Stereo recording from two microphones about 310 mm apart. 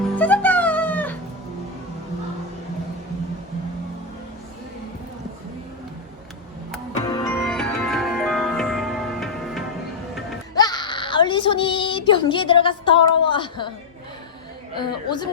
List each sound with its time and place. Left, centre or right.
0.2 s music: centre
6.9 s music: centre
10.5 s a sound: centre
14.8 s a woman's voice: centre